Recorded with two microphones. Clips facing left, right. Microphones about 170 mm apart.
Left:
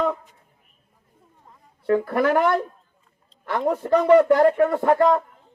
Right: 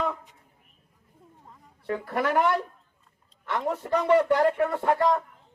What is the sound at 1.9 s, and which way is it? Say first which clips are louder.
Speech: left 7 dB; 45° left (ahead or behind).